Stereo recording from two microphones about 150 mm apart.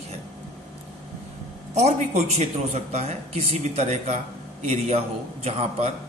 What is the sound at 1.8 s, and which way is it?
A man's voice, 45° right (ahead or behind).